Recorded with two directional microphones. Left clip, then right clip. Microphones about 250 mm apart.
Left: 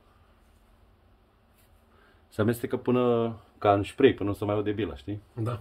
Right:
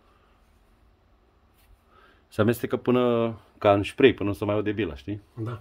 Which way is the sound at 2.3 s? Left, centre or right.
Right.